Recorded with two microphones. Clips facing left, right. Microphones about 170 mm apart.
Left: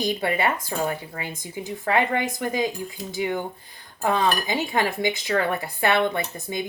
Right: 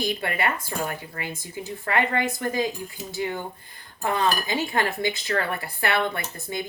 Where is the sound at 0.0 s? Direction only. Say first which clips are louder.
Left 3 dB; 20° left (ahead or behind).